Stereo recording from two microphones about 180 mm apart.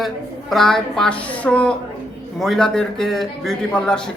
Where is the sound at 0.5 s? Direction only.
Centre (ahead or behind).